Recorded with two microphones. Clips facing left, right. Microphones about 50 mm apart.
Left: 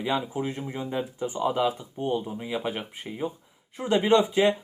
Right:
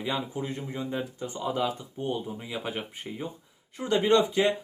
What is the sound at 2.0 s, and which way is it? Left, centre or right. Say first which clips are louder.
Speech: left 2 dB; centre.